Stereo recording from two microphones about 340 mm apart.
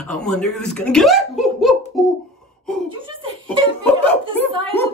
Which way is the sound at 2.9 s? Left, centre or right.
Centre.